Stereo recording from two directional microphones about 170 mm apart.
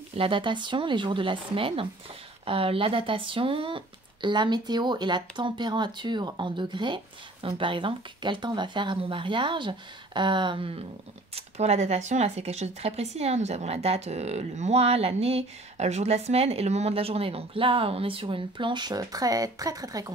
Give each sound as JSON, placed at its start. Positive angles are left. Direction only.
{"t": 0.1, "sound": "speech", "side_deg": -30}